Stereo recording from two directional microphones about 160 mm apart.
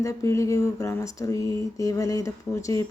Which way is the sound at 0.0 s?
20° left (ahead or behind).